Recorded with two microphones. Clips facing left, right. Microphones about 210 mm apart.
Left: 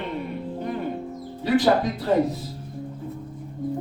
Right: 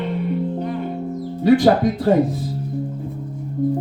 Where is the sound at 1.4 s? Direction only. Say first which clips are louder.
Right 6 dB; 50° right (ahead or behind).